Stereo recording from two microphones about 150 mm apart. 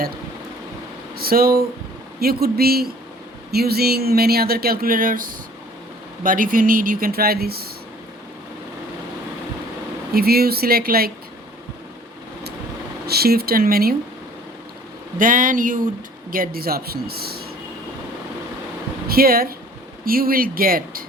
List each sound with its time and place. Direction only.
1.1 s speech: 85° right
10.1 s speech: 90° right
13.1 s speech: 90° right
15.2 s speech: 65° right (ahead or behind)
16.3 s speech: 75° right (ahead or behind)
19.0 s speech: 80° right